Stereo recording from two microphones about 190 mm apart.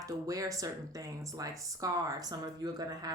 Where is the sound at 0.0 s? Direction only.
15° right (ahead or behind).